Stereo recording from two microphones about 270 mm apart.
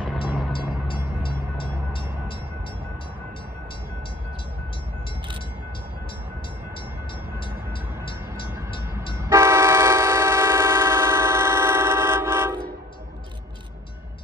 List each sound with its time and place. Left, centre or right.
0.5 s train: centre
9.3 s train: centre